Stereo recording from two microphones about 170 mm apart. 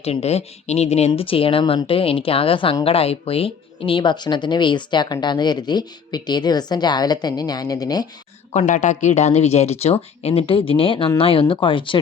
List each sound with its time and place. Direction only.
0.0 s speech: 40° left (ahead or behind); by 8.0 s 20° left (ahead or behind)
8.5 s speech: 45° left (ahead or behind); by 11.9 s 30° left (ahead or behind)